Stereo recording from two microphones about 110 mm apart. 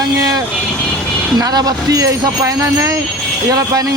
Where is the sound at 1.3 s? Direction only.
35° right (ahead or behind).